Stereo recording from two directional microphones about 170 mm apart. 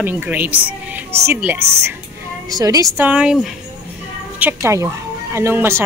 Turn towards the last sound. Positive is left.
turn(degrees=-15)  # may be behind; listen again after turning